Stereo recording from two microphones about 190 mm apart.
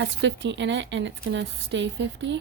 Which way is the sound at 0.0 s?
70° right (ahead or behind).